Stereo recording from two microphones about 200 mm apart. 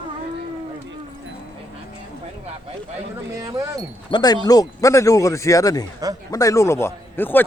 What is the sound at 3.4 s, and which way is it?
Speech, 20° right (ahead or behind).